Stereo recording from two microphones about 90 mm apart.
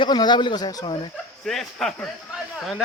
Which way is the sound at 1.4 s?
5° left (ahead or behind).